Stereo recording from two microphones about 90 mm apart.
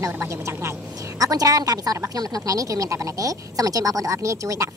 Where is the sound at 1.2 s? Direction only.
40° right (ahead or behind).